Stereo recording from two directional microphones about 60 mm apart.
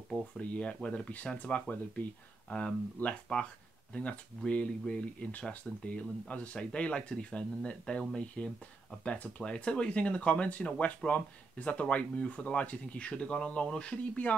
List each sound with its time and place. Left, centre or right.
0.4 s speech: left